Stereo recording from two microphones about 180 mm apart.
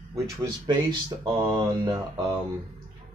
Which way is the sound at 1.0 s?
20° right (ahead or behind).